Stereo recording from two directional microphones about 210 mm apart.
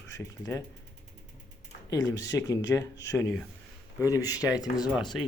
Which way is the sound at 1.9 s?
15° left (ahead or behind).